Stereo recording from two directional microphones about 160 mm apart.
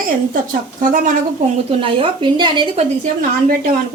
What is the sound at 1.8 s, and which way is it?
A woman's voice, 35° right (ahead or behind).